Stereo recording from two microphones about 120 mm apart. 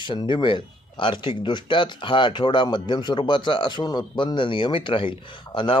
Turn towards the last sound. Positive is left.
turn(degrees=45)  # may be behind; listen again after turning